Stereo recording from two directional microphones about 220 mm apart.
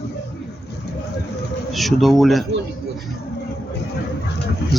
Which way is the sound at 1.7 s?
Centre (ahead or behind).